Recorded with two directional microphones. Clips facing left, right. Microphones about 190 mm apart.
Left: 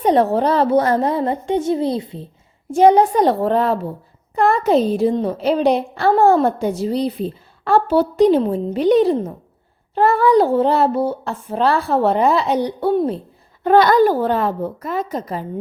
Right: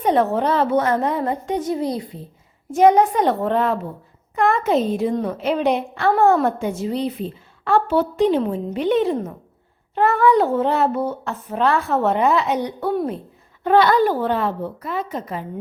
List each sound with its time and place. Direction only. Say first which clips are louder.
0.0 s a woman's voice: left 3 dB; 35° left (ahead or behind)
13.7 s a woman's voice: left 3 dB; 40° left (ahead or behind)